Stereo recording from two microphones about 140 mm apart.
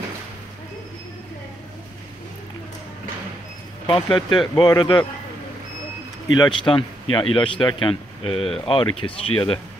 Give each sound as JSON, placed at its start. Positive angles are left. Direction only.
{"t": 3.8, "sound": "speech", "side_deg": 35}
{"t": 6.3, "sound": "speech", "side_deg": 35}